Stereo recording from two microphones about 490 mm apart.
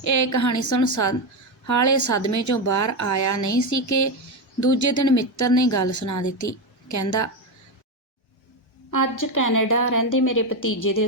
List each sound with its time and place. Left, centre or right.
0.0 s a woman's voice: left
8.9 s a woman's voice: left